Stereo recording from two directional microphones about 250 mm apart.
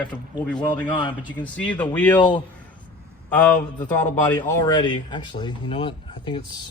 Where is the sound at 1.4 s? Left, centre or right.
Centre.